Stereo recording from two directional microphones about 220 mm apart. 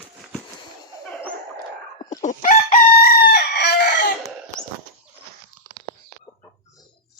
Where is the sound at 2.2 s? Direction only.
35° left (ahead or behind).